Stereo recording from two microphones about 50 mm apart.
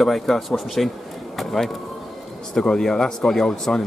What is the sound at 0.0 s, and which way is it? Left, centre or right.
Speech, centre.